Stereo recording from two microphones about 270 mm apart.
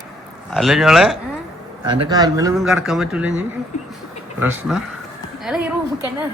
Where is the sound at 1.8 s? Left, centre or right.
Centre.